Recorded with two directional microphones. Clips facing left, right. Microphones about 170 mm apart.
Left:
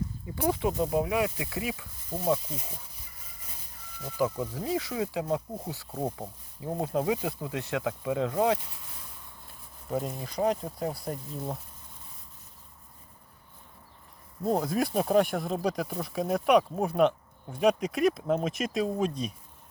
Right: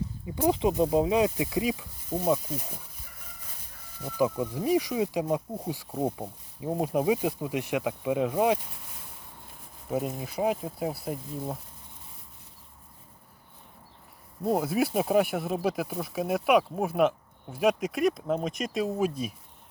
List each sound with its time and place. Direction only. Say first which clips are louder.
0.4 s speech: right 3 dB; 20° right (ahead or behind)
4.0 s speech: right 2 dB; 15° right (ahead or behind)
9.9 s speech: right 2 dB; 10° right (ahead or behind)
14.4 s speech: right 1 dB; 5° right (ahead or behind)